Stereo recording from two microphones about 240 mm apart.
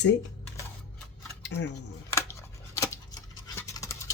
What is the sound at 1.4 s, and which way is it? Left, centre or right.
Dishes, left.